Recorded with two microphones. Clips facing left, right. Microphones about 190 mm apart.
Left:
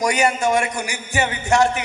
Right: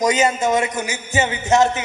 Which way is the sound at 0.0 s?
20° right (ahead or behind).